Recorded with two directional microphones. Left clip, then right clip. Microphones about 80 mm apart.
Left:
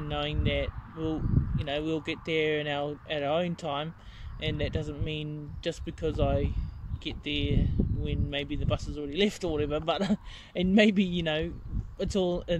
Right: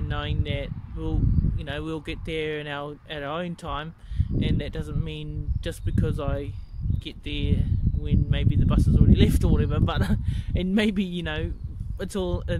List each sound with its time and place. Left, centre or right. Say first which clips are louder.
0.0 s speech: left 1 dB; right